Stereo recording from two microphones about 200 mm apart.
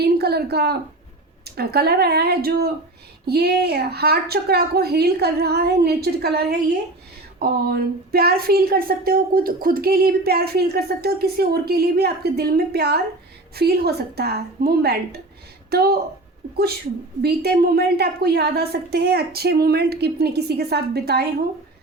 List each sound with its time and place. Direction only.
0.0 s a sound: 55° right (ahead or behind)
1.5 s speech: 50° right (ahead or behind)
17.2 s speech: 55° right (ahead or behind)